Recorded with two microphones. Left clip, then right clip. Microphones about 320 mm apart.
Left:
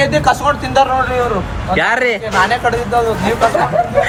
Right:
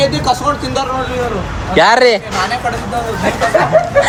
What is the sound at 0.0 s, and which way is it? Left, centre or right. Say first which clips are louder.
Speech: left 1 dB; left.